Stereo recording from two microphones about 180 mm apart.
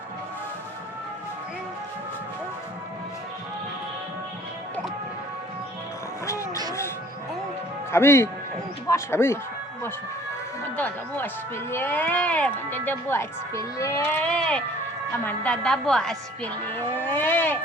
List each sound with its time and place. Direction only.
6.2 s a sound: 15° left (ahead or behind)
7.9 s speech: 15° left (ahead or behind)
10.8 s a woman's voice: 10° left (ahead or behind)